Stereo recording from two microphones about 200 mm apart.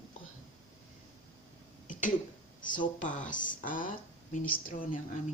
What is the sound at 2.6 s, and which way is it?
Speech, 40° left (ahead or behind).